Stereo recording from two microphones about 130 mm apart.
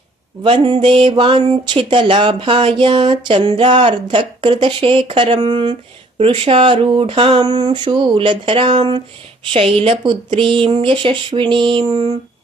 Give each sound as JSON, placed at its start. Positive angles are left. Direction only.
{"t": 0.4, "sound": "speech", "side_deg": -40}